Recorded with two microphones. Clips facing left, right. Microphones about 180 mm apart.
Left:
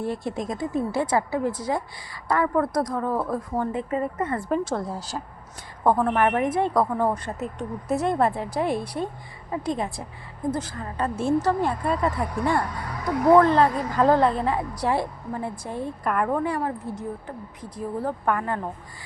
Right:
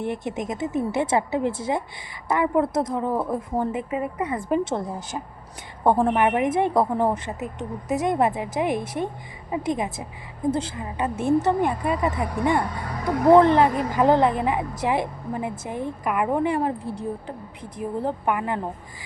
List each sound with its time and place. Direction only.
0.0 s a woman's voice: 20° right (ahead or behind)
10.5 s a woman's voice: 25° right (ahead or behind)
10.8 s a woman's voice: 15° right (ahead or behind)
16.3 s a woman's voice: 20° right (ahead or behind)
18.3 s a woman's voice: 15° right (ahead or behind)